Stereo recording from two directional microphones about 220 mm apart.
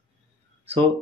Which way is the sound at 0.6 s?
25° right (ahead or behind).